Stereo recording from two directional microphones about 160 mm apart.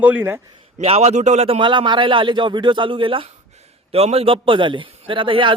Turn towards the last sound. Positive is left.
turn(degrees=-30)  # may be behind; listen again after turning